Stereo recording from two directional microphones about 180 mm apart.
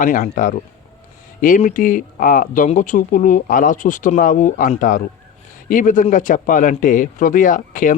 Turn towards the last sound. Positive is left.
turn(degrees=45)  # may be behind; listen again after turning